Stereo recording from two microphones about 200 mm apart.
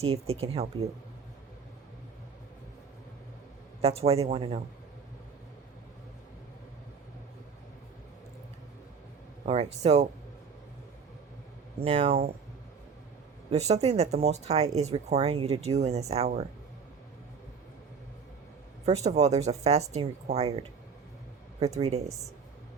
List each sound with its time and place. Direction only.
0.0 s speech: 30° right (ahead or behind)
3.8 s speech: 30° right (ahead or behind)
9.5 s speech: 30° right (ahead or behind)
11.8 s speech: 30° right (ahead or behind)
13.5 s speech: 30° right (ahead or behind)
18.9 s speech: 35° right (ahead or behind)